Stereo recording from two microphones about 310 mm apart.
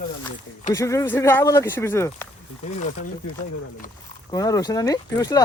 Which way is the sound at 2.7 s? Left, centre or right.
Left.